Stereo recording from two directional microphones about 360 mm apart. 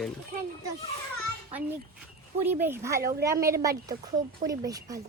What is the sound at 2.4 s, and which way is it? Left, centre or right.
A woman's voice, centre.